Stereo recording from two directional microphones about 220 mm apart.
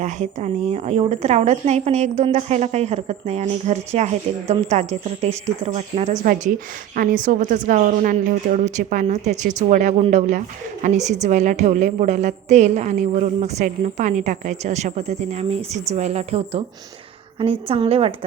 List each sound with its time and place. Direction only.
0.0 s a woman's voice: 30° right (ahead or behind)